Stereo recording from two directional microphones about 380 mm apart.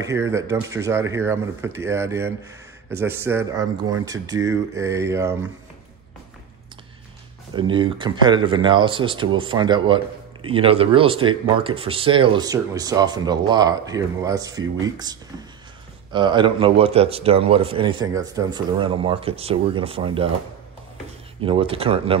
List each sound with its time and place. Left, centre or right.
0.0 s speech: centre
7.5 s speech: centre
21.4 s speech: centre